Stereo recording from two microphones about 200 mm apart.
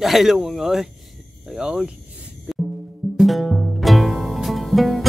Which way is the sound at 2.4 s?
Centre (ahead or behind).